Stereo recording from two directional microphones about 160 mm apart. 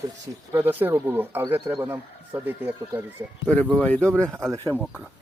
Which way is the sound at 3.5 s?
5° left (ahead or behind).